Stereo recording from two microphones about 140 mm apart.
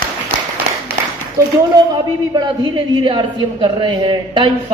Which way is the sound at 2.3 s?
30° right (ahead or behind).